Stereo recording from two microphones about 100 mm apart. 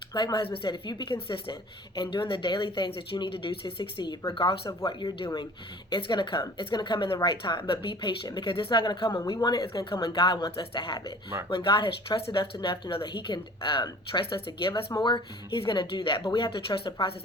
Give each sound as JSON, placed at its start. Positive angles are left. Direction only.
{"t": 0.1, "sound": "speech", "side_deg": 45}
{"t": 0.4, "sound": "speech", "side_deg": 65}
{"t": 0.7, "sound": "speech", "side_deg": 50}
{"t": 10.0, "sound": "speech", "side_deg": 55}